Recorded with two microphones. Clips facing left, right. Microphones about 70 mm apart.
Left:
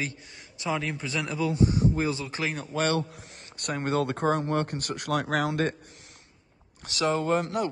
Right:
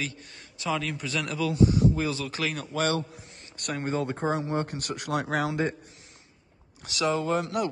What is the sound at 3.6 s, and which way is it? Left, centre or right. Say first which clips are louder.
Speech: left 1 dB; left.